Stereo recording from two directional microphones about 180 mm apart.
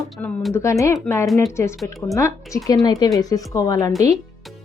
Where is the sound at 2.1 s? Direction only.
15° left (ahead or behind).